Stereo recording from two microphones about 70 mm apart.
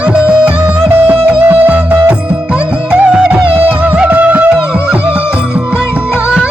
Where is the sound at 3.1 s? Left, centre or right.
Centre.